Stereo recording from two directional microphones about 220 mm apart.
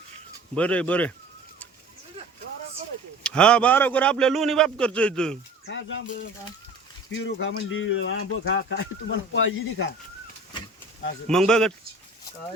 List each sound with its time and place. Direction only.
0.5 s a man's voice: 5° left (ahead or behind)
3.2 s a man's voice: 5° left (ahead or behind)
5.6 s speech: 55° left (ahead or behind)
7.1 s speech: 55° left (ahead or behind)
11.3 s a man's voice: 5° left (ahead or behind)